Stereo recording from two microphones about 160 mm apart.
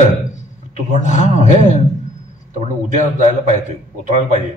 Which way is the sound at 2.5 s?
50° right (ahead or behind).